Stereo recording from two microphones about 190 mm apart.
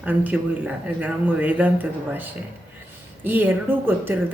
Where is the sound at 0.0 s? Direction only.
10° right (ahead or behind).